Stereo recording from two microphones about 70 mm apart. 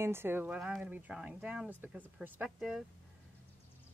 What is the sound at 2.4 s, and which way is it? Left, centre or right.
Speech, centre.